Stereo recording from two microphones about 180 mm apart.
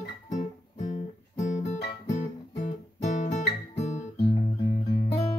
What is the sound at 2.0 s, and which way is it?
Guitar, 40° left (ahead or behind).